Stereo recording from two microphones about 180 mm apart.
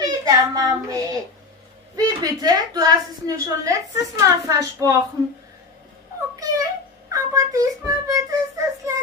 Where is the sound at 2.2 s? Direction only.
20° right (ahead or behind).